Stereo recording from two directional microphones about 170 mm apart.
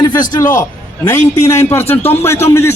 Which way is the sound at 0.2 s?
20° left (ahead or behind).